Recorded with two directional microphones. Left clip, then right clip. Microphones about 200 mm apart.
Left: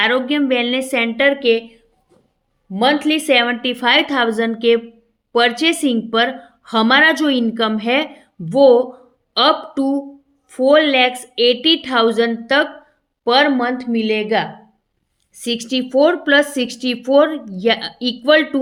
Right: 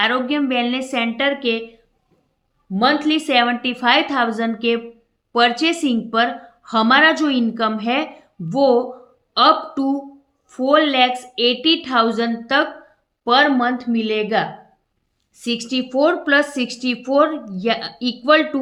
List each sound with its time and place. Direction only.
0.0 s a woman's voice: 30° left (ahead or behind)
2.7 s a woman's voice: 35° left (ahead or behind)